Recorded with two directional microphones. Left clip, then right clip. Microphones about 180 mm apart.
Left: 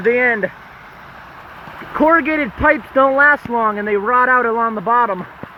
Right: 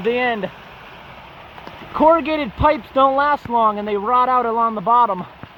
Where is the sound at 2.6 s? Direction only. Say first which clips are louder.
Left 2 dB; 15° left (ahead or behind).